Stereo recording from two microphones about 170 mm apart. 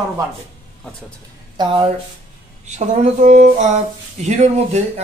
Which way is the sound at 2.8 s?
45° right (ahead or behind).